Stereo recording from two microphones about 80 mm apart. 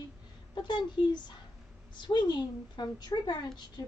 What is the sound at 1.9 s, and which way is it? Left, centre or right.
A woman's voice, left.